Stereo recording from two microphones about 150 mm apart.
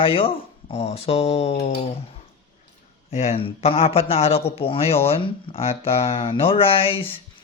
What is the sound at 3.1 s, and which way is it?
A man's voice, 50° left (ahead or behind).